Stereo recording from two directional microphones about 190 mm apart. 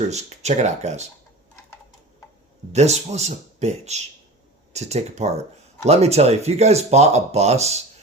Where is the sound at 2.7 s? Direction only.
35° right (ahead or behind).